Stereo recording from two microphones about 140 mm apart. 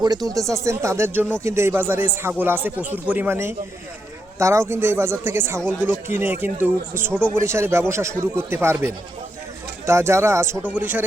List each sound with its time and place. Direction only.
0.3 s speech: 20° right (ahead or behind)